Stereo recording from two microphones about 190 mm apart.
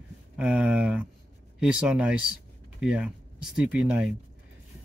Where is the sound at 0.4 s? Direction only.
5° right (ahead or behind).